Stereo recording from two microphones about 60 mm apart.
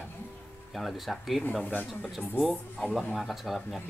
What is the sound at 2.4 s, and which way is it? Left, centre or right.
Speech, centre.